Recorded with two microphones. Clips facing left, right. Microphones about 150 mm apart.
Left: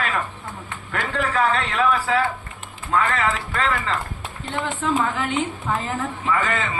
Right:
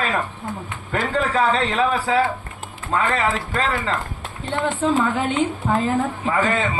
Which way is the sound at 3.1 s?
35° right (ahead or behind).